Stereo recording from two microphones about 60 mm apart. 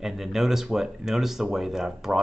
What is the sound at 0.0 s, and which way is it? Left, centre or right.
Speech, centre.